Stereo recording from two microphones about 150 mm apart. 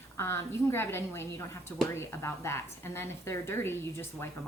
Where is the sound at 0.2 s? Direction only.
15° left (ahead or behind).